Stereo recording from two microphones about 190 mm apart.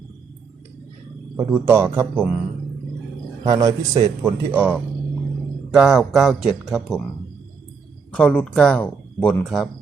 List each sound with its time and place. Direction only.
1.4 s speech: 10° right (ahead or behind)
3.4 s speech: 20° right (ahead or behind); by 7.0 s centre (ahead or behind)
8.1 s speech: 5° left (ahead or behind)